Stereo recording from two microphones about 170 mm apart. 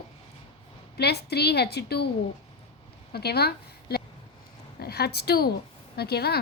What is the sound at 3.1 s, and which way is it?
A woman's voice, 70° left (ahead or behind).